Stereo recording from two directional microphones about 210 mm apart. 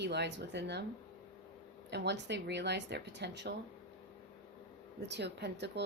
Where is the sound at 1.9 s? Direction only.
55° right (ahead or behind).